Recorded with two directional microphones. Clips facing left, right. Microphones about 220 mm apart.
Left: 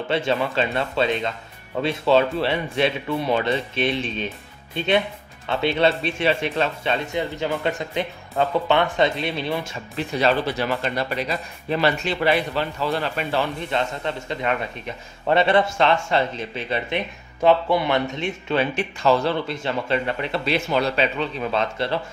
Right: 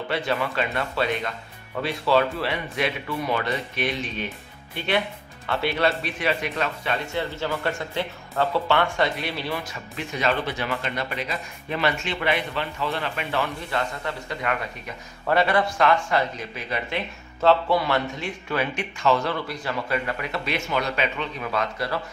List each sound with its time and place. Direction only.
0.1 s speech: 25° left (ahead or behind)
17.4 s speech: 15° left (ahead or behind)